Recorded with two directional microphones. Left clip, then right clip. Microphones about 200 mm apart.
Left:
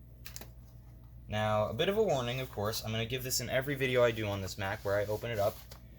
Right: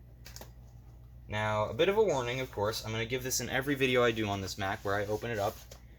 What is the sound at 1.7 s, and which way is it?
Speech, 15° right (ahead or behind).